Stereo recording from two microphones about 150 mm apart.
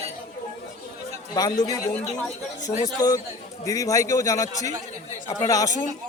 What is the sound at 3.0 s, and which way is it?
A man's voice, 25° left (ahead or behind).